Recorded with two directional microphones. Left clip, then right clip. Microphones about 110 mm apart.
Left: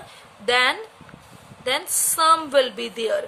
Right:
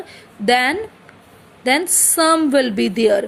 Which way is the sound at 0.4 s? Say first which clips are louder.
Right 4 dB; 45° right (ahead or behind).